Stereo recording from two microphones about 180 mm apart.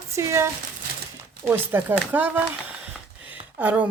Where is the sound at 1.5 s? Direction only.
10° right (ahead or behind).